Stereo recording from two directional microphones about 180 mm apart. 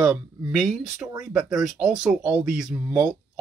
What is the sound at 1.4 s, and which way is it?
Speech, 20° right (ahead or behind).